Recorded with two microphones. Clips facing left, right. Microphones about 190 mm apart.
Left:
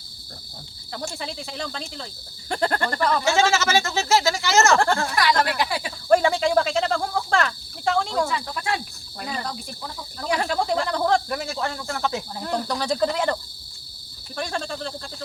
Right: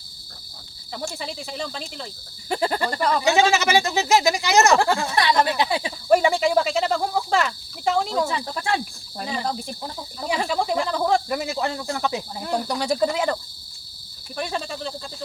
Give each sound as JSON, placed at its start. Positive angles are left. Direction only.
{"t": 1.0, "sound": "speech", "side_deg": 0}
{"t": 6.1, "sound": "a sound", "side_deg": -5}
{"t": 8.3, "sound": "speech", "side_deg": -30}
{"t": 10.2, "sound": "speech", "side_deg": -5}
{"t": 11.3, "sound": "speech", "side_deg": -15}
{"t": 14.3, "sound": "speech", "side_deg": -5}